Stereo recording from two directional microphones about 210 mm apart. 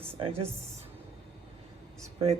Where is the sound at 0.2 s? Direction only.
30° right (ahead or behind).